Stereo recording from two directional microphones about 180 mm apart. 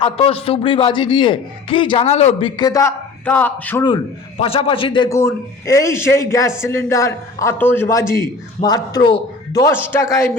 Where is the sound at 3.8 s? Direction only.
30° left (ahead or behind).